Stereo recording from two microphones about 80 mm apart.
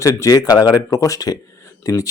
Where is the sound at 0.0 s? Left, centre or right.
Left.